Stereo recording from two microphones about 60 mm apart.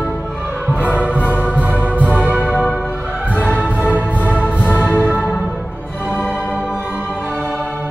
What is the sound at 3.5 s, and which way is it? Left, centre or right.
Music, right.